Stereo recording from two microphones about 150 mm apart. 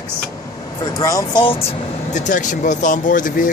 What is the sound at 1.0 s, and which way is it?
Speech, 25° left (ahead or behind).